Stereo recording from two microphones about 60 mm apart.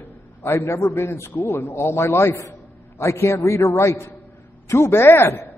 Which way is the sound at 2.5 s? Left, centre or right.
Left.